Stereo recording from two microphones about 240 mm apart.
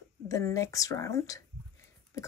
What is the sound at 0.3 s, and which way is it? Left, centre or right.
Speech, centre.